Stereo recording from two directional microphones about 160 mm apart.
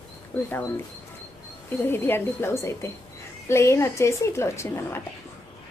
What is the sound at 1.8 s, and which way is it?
A woman's voice, 15° left (ahead or behind).